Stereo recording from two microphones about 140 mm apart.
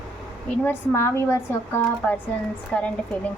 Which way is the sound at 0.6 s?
15° left (ahead or behind).